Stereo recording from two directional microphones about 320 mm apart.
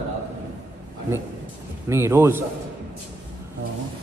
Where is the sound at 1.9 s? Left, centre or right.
Centre.